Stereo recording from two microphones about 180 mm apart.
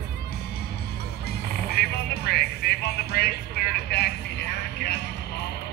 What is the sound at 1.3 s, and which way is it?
Music, 60° left (ahead or behind).